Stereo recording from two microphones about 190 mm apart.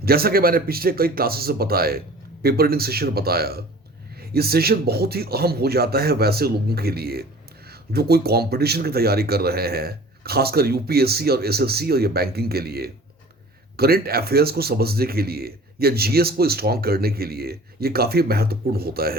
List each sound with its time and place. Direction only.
0.0 s speech: 55° right (ahead or behind)